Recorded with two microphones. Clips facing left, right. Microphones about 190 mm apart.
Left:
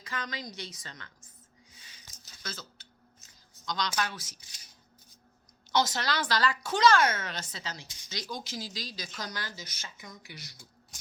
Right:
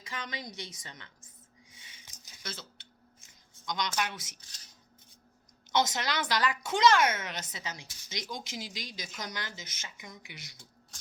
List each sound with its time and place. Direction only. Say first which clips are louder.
0.0 s a woman's voice: left 2 dB; 25° right (ahead or behind)
1.7 s a sound: even; 25° right (ahead or behind)
2.0 s a sound: left 1 dB; 15° right (ahead or behind)
3.7 s a woman's voice: left 1 dB; 20° right (ahead or behind)
4.4 s speech: even; 10° left (ahead or behind)
5.7 s a woman's voice: left 1 dB; 20° right (ahead or behind)